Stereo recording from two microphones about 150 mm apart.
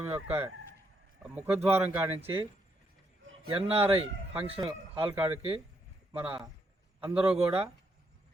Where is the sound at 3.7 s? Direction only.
40° right (ahead or behind).